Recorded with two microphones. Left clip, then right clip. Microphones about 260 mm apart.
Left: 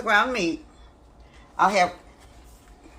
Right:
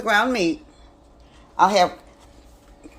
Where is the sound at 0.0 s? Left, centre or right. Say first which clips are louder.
Right 2 dB; right.